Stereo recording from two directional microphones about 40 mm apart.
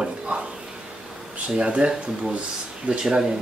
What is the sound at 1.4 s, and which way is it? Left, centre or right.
Speech, right.